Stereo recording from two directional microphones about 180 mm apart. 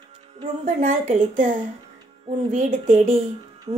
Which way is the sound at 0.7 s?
45° right (ahead or behind).